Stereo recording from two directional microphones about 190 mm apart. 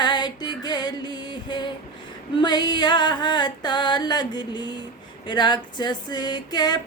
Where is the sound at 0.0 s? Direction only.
25° left (ahead or behind).